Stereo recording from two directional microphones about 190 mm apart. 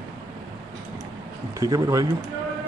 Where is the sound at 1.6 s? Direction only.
15° right (ahead or behind).